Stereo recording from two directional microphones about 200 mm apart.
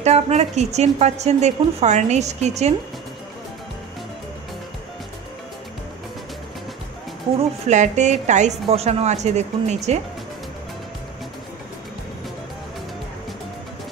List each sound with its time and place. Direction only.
0.0 s a woman's voice: 35° right (ahead or behind)
7.6 s a woman's voice: 35° right (ahead or behind)